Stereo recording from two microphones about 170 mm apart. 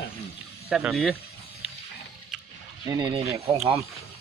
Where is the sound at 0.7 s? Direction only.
5° right (ahead or behind).